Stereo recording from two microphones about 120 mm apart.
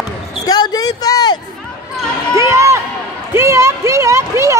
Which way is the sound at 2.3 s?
25° right (ahead or behind).